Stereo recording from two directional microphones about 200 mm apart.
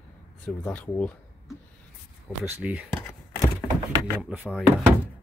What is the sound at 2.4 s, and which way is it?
Speech, 5° right (ahead or behind).